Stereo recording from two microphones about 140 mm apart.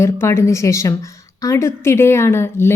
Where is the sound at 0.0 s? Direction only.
20° left (ahead or behind).